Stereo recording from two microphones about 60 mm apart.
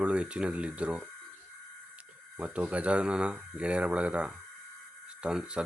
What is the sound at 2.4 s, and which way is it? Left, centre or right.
Speech, centre.